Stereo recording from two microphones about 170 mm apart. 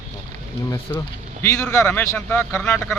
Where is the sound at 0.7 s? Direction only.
15° left (ahead or behind).